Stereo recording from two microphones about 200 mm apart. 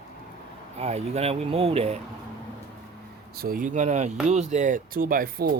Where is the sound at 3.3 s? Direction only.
50° right (ahead or behind).